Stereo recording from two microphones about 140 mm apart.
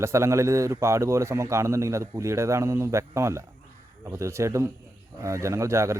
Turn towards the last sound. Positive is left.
turn(degrees=-20)  # may be behind; listen again after turning